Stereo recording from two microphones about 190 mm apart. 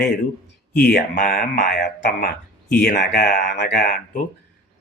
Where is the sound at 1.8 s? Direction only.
65° left (ahead or behind).